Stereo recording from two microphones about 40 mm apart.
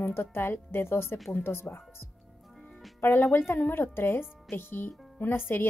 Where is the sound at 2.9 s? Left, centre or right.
Left.